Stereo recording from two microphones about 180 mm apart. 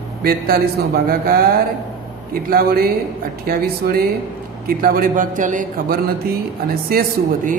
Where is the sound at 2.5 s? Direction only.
55° right (ahead or behind).